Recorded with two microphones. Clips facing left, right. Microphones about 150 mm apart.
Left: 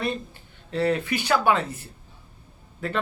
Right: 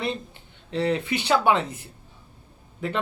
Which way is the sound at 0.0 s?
20° right (ahead or behind).